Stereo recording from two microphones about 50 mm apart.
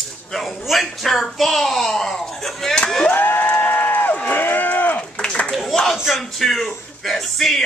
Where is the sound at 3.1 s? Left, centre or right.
Left.